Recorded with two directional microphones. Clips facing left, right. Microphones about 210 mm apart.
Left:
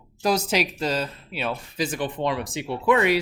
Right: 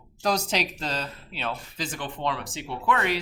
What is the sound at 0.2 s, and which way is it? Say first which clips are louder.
Speech: left 3 dB; 5° left (ahead or behind).